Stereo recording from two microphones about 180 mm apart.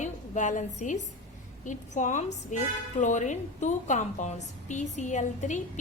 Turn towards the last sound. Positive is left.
turn(degrees=40)  # may be behind; listen again after turning